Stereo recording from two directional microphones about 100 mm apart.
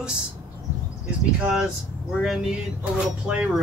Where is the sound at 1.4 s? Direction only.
5° right (ahead or behind).